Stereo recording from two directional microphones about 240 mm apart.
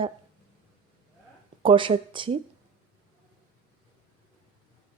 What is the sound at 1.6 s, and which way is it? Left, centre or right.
Speech, right.